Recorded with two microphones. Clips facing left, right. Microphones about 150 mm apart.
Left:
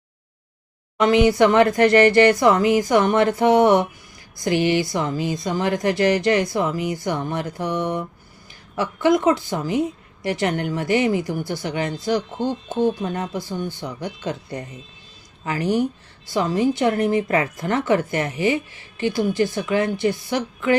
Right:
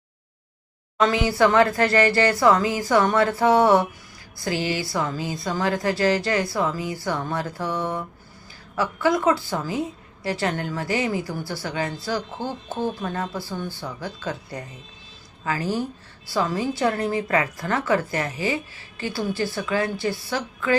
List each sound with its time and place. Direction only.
0.9 s a woman's voice: 20° left (ahead or behind)